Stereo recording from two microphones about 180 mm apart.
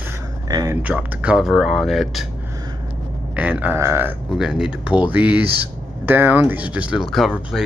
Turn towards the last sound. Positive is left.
turn(degrees=0)  # may be behind; listen again after turning